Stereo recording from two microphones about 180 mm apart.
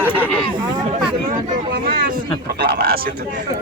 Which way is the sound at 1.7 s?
60° right (ahead or behind).